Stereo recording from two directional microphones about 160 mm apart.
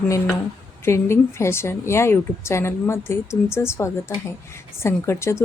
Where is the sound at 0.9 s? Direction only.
15° left (ahead or behind).